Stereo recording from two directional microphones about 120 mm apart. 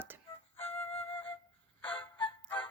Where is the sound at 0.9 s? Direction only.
50° left (ahead or behind).